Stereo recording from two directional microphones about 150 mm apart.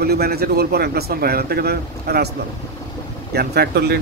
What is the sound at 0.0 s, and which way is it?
A man's voice, 90° right.